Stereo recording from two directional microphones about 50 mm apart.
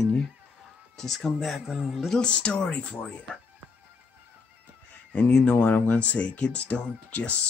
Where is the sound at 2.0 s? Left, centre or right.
Centre.